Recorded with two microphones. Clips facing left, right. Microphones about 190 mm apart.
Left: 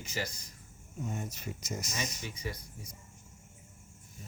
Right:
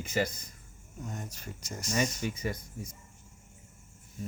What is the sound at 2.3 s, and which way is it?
Speech, 50° right (ahead or behind).